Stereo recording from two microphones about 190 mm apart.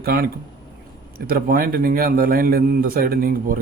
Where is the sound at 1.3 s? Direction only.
50° right (ahead or behind).